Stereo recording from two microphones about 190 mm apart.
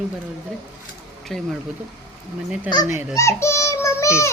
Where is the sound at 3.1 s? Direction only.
15° left (ahead or behind).